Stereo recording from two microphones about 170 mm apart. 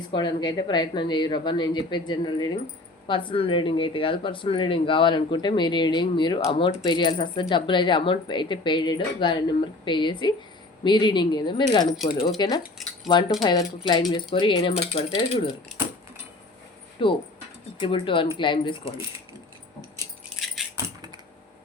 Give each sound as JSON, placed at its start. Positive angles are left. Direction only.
{"t": 0.1, "sound": "speech", "side_deg": 25}
{"t": 17.0, "sound": "speech", "side_deg": 30}